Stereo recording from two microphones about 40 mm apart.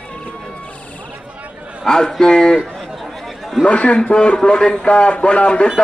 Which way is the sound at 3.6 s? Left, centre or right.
Left.